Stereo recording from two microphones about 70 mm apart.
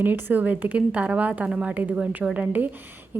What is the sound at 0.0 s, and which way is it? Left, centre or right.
A woman's voice, right.